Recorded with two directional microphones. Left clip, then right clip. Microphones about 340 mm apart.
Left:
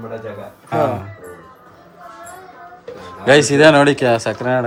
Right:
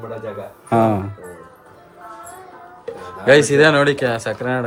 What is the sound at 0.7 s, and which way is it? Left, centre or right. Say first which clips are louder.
Speech: right 2 dB; centre.